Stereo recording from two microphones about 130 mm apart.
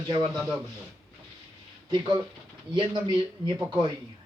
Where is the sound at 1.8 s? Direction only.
35° right (ahead or behind).